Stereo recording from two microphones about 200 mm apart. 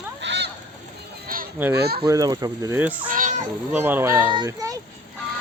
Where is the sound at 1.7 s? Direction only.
55° right (ahead or behind).